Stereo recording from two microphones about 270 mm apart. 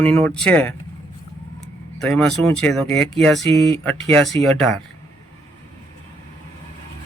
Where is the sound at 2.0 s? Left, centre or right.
Centre.